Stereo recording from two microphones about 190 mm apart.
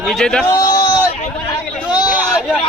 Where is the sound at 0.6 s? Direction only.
20° left (ahead or behind).